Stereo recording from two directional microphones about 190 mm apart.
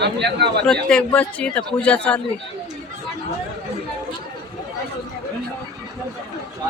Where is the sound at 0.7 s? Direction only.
5° left (ahead or behind).